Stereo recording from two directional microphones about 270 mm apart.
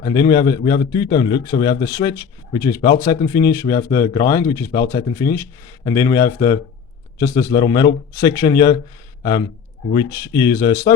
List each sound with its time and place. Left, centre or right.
0.0 s speech: centre
9.9 s speech: centre